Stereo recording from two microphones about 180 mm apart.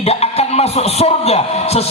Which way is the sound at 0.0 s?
35° left (ahead or behind).